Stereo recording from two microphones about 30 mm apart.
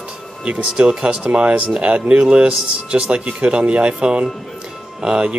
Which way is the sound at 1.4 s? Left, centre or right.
Right.